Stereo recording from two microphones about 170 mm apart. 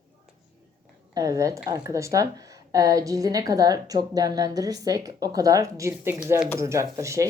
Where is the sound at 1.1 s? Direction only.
20° right (ahead or behind).